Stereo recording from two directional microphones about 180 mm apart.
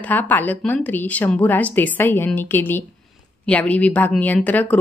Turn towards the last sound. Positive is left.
turn(degrees=10)  # may be behind; listen again after turning